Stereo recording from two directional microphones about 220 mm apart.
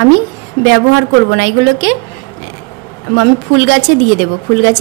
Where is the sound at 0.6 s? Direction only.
55° right (ahead or behind).